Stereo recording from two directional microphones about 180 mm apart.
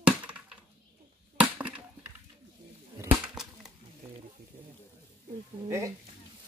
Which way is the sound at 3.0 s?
5° right (ahead or behind).